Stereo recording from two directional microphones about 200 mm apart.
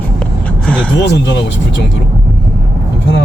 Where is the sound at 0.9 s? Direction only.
60° left (ahead or behind).